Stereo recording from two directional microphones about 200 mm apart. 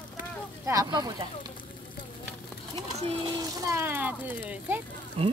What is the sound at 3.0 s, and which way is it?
Speech, 20° right (ahead or behind).